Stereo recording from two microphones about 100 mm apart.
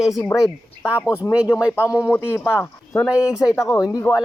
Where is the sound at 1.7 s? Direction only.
20° left (ahead or behind).